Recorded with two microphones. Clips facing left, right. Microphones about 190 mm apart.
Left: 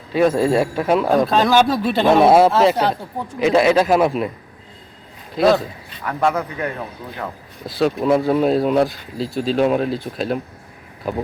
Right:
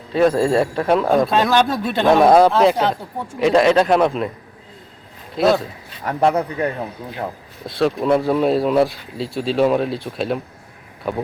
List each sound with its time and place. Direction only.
0.2 s speech: 5° left (ahead or behind)
5.4 s speech: centre (ahead or behind)
6.0 s a man's voice: 35° right (ahead or behind)
7.7 s speech: centre (ahead or behind)